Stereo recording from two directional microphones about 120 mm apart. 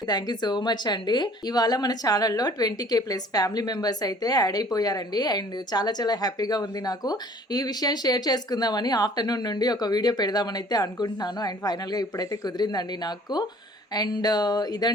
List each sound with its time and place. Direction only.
0.1 s speech: 35° left (ahead or behind)